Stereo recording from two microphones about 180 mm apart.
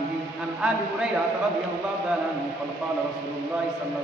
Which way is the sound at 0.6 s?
5° right (ahead or behind).